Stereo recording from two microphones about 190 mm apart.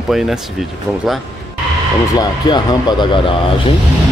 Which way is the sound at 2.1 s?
20° left (ahead or behind).